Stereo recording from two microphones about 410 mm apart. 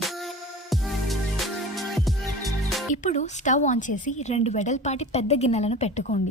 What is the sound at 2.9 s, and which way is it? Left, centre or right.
A woman's voice, centre.